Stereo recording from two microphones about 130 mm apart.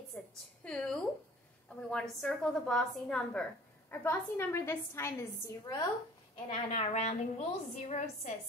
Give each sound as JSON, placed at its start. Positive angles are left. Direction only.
{"t": 0.1, "sound": "a sound", "side_deg": 10}
{"t": 0.7, "sound": "a woman's voice", "side_deg": 5}
{"t": 6.5, "sound": "a woman's voice", "side_deg": 55}